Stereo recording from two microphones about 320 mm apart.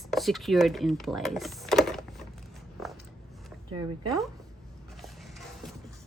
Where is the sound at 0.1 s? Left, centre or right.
Centre.